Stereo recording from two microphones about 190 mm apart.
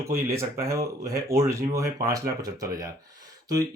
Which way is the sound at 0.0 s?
15° right (ahead or behind).